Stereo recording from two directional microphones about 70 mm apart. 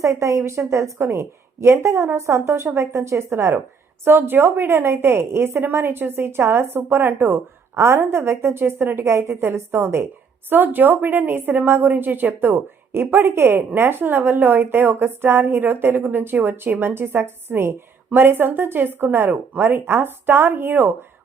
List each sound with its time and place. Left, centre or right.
0.0 s a woman's voice: right
9.0 s a woman's voice: right